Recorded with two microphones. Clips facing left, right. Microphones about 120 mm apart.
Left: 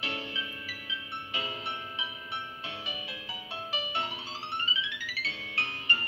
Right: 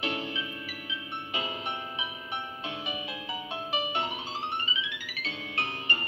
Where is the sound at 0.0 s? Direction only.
20° right (ahead or behind).